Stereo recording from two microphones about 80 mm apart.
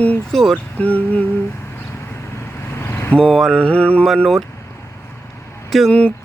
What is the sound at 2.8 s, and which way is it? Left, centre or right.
Vehicle, left.